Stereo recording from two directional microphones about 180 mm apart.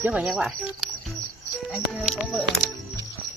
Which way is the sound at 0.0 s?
5° right (ahead or behind).